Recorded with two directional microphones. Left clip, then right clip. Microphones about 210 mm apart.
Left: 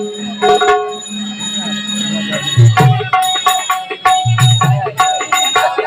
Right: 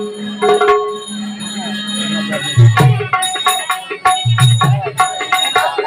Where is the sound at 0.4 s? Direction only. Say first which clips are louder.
Left 1 dB; 5° left (ahead or behind).